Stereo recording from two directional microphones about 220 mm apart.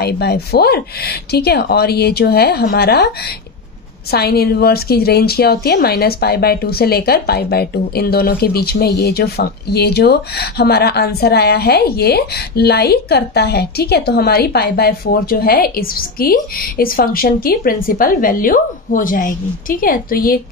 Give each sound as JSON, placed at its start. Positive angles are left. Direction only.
{"t": 0.0, "sound": "a woman's voice", "side_deg": 45}